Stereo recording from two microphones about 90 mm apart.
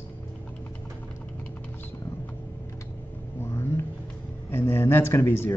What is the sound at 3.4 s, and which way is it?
Vehicle, 30° left (ahead or behind).